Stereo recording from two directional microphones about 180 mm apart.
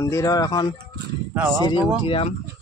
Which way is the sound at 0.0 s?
20° left (ahead or behind).